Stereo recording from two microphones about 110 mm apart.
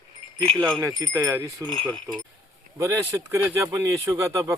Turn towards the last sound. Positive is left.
turn(degrees=-25)  # may be behind; listen again after turning